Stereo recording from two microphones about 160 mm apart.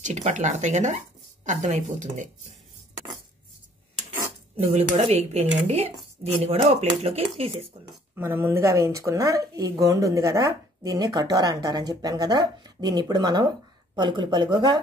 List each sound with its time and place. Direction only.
0.0 s speech: 50° right (ahead or behind)
4.9 s speech: 40° right (ahead or behind)
8.2 s speech: 15° right (ahead or behind)